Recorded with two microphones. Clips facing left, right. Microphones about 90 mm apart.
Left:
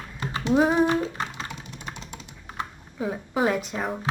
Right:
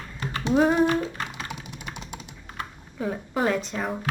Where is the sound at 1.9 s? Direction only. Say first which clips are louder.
Right 1 dB; 15° right (ahead or behind).